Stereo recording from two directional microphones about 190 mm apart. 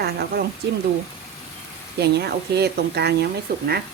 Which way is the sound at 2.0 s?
60° right (ahead or behind).